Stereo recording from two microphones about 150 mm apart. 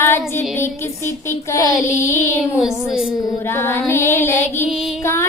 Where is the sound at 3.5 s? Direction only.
15° left (ahead or behind).